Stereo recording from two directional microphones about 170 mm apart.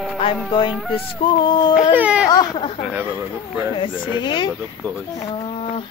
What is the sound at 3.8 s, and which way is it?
Speech, 25° left (ahead or behind).